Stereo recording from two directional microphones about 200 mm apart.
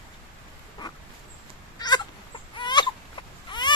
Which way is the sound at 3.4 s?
20° left (ahead or behind).